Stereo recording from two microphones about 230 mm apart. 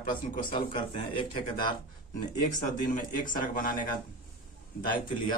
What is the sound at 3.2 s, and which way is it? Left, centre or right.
Speech, left.